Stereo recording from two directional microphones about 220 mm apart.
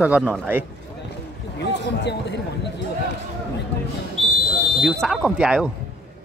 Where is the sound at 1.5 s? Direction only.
50° left (ahead or behind).